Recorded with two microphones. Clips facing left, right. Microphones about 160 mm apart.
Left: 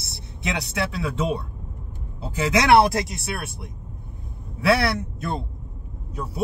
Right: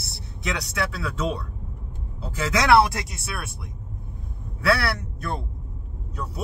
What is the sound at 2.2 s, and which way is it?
Speech, 25° left (ahead or behind).